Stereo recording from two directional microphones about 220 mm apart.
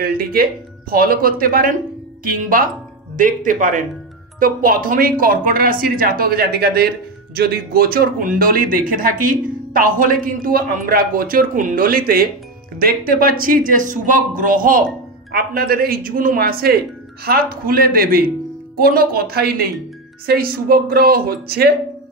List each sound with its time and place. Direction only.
0.0 s speech: 40° right (ahead or behind)
3.2 s speech: 40° right (ahead or behind)